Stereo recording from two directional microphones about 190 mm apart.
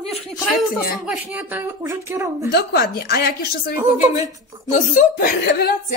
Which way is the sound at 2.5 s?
55° left (ahead or behind).